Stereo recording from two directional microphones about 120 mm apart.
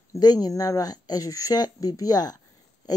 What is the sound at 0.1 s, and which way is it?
Speech, 35° left (ahead or behind).